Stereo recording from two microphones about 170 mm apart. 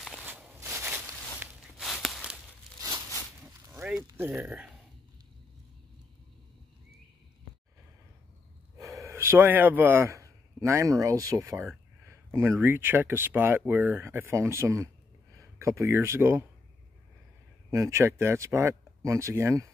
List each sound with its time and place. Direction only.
0.2 s walk: 10° right (ahead or behind)
1.8 s a sound: centre (ahead or behind)
3.7 s a sound: 5° right (ahead or behind)
4.1 s speech: 10° right (ahead or behind)
8.7 s speech: 20° right (ahead or behind)
17.6 s speech: 15° right (ahead or behind)